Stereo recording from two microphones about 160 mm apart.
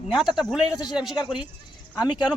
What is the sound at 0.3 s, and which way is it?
Speech, 5° right (ahead or behind).